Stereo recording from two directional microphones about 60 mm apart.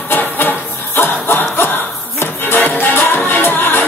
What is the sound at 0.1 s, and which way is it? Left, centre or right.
Music, left.